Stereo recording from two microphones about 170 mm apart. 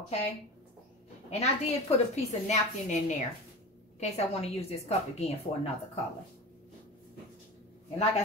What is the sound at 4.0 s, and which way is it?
A woman's voice, 40° left (ahead or behind).